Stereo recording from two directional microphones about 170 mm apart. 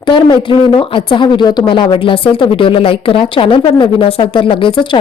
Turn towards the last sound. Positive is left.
turn(degrees=30)  # may be behind; listen again after turning